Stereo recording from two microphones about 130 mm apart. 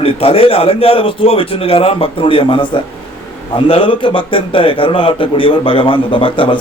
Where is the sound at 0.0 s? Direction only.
45° left (ahead or behind).